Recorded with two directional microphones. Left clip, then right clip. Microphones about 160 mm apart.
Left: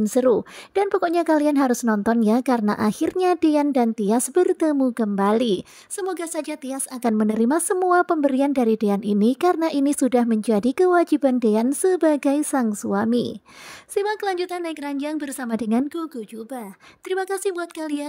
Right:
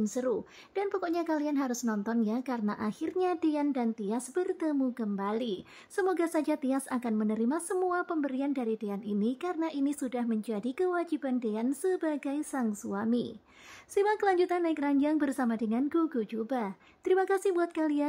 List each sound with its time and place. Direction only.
0.0 s a woman's voice: 50° left (ahead or behind)
13.9 s a woman's voice: 35° left (ahead or behind)
17.1 s a woman's voice: 45° left (ahead or behind)